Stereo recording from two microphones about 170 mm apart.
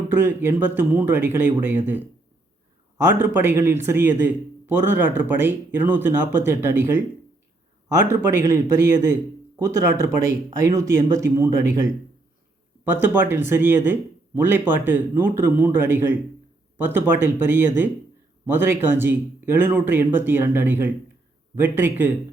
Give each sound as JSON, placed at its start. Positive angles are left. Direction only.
{"t": 0.1, "sound": "a man's voice", "side_deg": -15}
{"t": 8.0, "sound": "a man's voice", "side_deg": -15}
{"t": 12.9, "sound": "a man's voice", "side_deg": -10}